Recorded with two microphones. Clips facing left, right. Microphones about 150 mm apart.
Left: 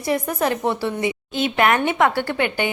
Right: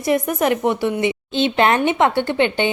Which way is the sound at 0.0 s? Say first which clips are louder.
Right 3 dB; 20° right (ahead or behind).